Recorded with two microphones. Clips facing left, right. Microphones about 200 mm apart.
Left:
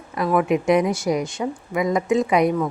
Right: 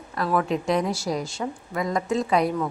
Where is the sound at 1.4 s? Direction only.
15° left (ahead or behind).